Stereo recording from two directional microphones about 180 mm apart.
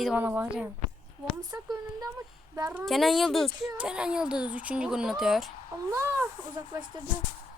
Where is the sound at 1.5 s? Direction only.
20° right (ahead or behind).